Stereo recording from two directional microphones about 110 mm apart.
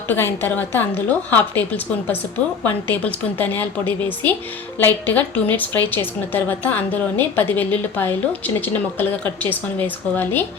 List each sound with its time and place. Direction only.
0.1 s a woman's voice: 20° left (ahead or behind)